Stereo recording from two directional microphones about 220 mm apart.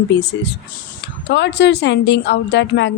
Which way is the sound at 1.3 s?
50° left (ahead or behind).